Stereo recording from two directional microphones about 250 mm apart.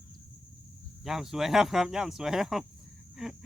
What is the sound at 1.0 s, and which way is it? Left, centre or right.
Speech, centre.